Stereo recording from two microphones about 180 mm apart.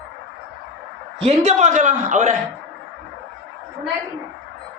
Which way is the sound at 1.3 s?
40° right (ahead or behind).